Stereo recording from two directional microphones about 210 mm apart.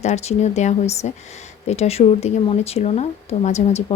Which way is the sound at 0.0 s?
30° left (ahead or behind).